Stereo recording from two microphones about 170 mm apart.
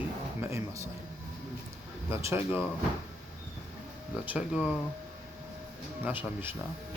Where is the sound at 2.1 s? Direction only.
15° right (ahead or behind).